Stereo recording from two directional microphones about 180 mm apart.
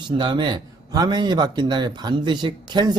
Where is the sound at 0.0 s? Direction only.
25° right (ahead or behind).